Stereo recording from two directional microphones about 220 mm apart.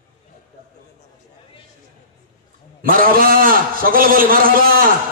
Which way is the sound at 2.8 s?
40° right (ahead or behind).